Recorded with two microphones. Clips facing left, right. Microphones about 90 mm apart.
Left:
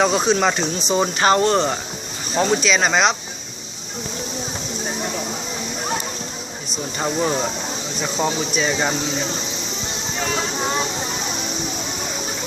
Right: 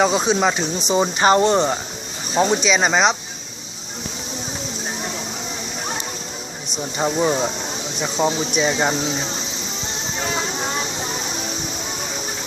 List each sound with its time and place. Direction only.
0.3 s speech: 5° right (ahead or behind)
7.0 s speech: 5° right (ahead or behind)